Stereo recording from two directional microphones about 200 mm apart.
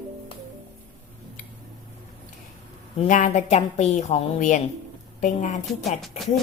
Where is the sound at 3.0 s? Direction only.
40° left (ahead or behind).